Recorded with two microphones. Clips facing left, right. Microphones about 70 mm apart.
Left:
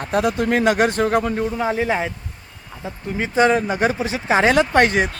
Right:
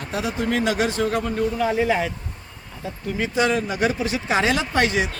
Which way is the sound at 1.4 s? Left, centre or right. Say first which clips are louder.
Even; left.